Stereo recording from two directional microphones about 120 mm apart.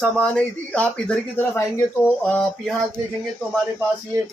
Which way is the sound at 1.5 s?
25° left (ahead or behind).